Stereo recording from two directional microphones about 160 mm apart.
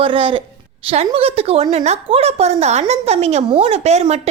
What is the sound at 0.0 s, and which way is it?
A woman's voice, 35° right (ahead or behind).